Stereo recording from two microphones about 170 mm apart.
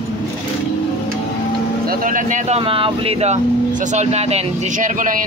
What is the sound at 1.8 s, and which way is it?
Speech, 50° right (ahead or behind).